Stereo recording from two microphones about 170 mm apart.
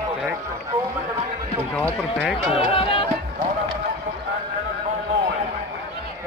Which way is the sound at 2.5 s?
35° left (ahead or behind).